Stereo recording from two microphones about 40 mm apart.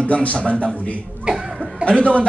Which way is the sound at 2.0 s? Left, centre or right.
Left.